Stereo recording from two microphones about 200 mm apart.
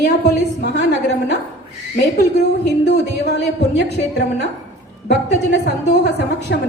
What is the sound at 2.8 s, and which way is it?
A woman's voice, 60° left (ahead or behind).